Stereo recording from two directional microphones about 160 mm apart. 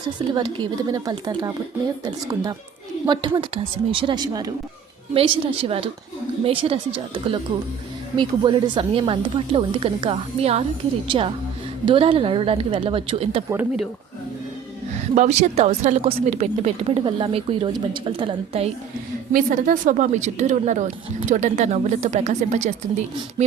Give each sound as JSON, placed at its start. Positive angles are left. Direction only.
{"t": 0.3, "sound": "a woman's voice", "side_deg": -25}
{"t": 15.1, "sound": "speech", "side_deg": -45}
{"t": 19.3, "sound": "a woman's voice", "side_deg": -60}